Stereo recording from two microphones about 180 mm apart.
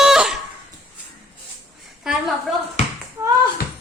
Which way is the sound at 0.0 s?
Centre (ahead or behind).